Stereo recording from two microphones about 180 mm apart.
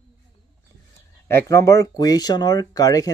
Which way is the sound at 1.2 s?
15° left (ahead or behind).